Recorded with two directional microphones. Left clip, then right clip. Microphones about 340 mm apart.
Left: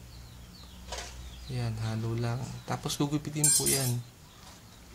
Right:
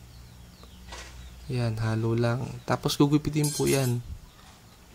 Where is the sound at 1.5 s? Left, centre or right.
Centre.